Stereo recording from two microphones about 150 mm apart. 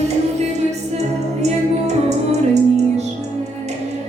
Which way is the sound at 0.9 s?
45° right (ahead or behind).